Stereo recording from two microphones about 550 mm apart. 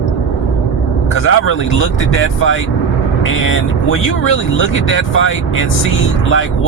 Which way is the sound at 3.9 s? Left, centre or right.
Left.